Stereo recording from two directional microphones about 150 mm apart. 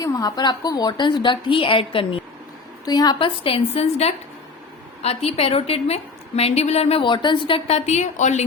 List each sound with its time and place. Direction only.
0.0 s a woman's voice: 25° left (ahead or behind)
2.8 s a woman's voice: 25° left (ahead or behind); by 8.4 s 50° left (ahead or behind)